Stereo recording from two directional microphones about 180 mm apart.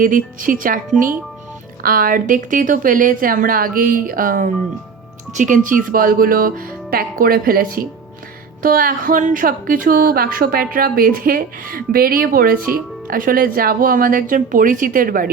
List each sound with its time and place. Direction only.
0.0 s a woman's voice: 50° right (ahead or behind)
1.8 s a woman's voice: 50° right (ahead or behind)